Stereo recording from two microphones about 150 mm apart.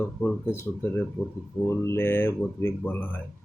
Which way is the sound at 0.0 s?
10° left (ahead or behind).